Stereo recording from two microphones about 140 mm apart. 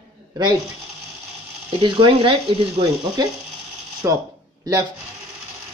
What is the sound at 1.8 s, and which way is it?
Speech, 35° right (ahead or behind).